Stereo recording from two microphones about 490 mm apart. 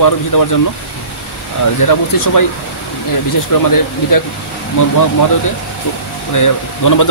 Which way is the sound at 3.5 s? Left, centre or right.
Left.